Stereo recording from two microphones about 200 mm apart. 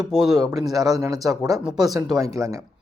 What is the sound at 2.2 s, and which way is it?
Speech, 15° right (ahead or behind).